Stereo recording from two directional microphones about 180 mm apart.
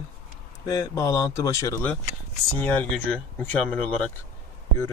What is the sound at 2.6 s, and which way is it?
Speech, 5° left (ahead or behind).